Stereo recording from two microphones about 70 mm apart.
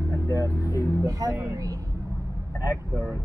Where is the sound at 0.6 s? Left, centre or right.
Left.